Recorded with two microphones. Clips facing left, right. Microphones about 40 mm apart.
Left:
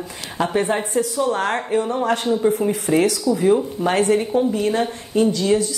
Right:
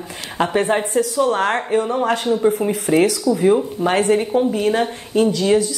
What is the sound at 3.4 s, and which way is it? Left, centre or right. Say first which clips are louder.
Speech: right 2 dB; centre.